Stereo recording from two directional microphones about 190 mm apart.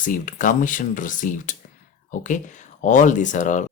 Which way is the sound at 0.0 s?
45° left (ahead or behind).